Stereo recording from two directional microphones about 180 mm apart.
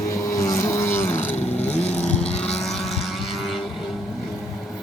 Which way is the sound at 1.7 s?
5° left (ahead or behind).